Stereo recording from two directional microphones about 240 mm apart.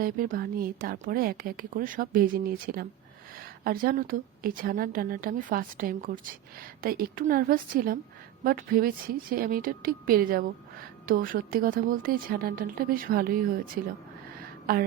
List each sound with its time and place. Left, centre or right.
0.0 s speech: right
14.7 s speech: right